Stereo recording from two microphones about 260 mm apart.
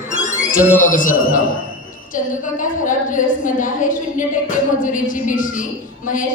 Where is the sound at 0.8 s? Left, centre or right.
Left.